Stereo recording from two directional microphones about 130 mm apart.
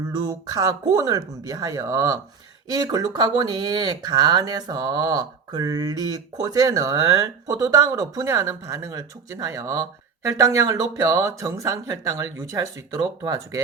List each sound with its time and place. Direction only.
0.1 s speech: 30° right (ahead or behind)